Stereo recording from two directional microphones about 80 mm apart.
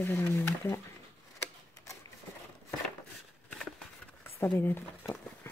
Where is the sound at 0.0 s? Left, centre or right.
Left.